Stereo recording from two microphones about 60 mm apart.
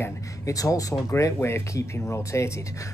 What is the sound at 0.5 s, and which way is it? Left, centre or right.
Speech, left.